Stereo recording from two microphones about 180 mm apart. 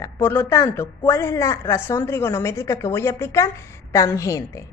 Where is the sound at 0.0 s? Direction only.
10° left (ahead or behind).